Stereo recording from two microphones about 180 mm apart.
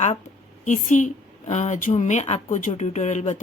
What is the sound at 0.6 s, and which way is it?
A woman's voice, 45° left (ahead or behind).